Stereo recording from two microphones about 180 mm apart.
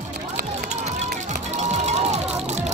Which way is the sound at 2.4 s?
40° right (ahead or behind).